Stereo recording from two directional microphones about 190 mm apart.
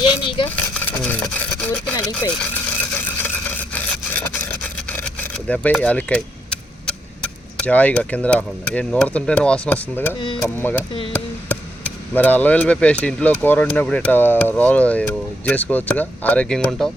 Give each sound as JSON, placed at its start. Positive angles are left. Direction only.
{"t": 0.0, "sound": "a sound", "side_deg": 25}
{"t": 0.4, "sound": "coin", "side_deg": 10}
{"t": 1.0, "sound": "speech", "side_deg": 5}
{"t": 2.9, "sound": "a sound", "side_deg": 10}
{"t": 10.2, "sound": "speech", "side_deg": 25}
{"t": 10.6, "sound": "speech", "side_deg": 10}
{"t": 12.1, "sound": "speech", "side_deg": 10}